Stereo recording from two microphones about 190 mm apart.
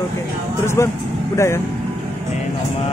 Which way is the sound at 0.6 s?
15° left (ahead or behind).